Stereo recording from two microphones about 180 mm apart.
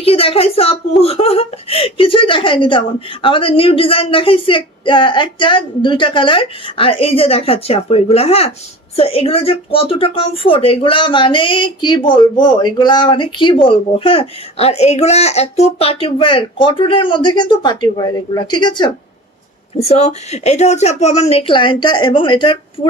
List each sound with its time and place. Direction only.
0.0 s a woman's voice: 30° left (ahead or behind)
19.8 s speech: 40° left (ahead or behind)